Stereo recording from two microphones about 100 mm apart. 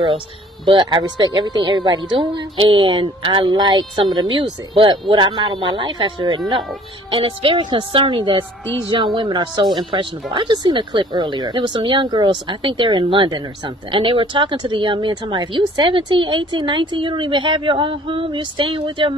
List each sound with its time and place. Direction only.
0.7 s a woman's voice: 60° right (ahead or behind)
7.1 s a woman's voice: 65° right (ahead or behind)